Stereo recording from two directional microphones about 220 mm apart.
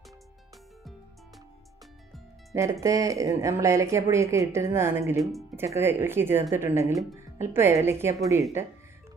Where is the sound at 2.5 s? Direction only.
15° right (ahead or behind).